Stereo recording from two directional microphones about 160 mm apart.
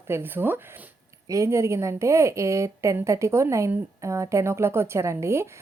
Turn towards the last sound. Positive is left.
turn(degrees=-15)  # may be behind; listen again after turning